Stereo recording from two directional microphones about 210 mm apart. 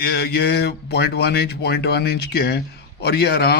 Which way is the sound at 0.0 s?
50° left (ahead or behind).